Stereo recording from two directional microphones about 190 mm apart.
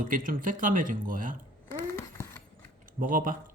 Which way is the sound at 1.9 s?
15° left (ahead or behind).